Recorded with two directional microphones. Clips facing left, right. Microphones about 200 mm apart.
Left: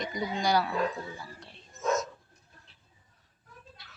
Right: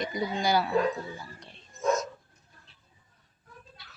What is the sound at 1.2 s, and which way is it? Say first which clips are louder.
Music: even; centre (ahead or behind).